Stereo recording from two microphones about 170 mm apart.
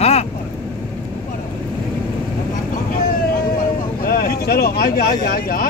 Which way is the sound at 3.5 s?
60° left (ahead or behind).